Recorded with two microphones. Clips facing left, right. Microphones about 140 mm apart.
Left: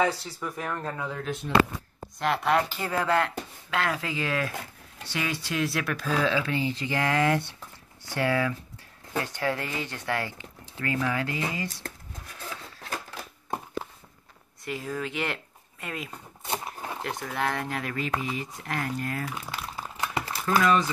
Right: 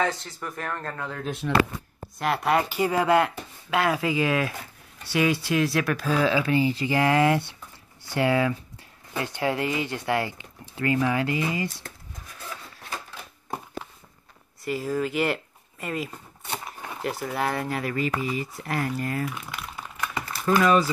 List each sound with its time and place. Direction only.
0.0 s speech: 5° left (ahead or behind)
1.4 s speech: 90° right
2.0 s speech: 5° right (ahead or behind)
14.6 s speech: 5° right (ahead or behind)
16.4 s a sound: 30° left (ahead or behind)
17.0 s speech: 5° right (ahead or behind)
19.5 s a sound: 30° left (ahead or behind)
20.4 s speech: 5° right (ahead or behind)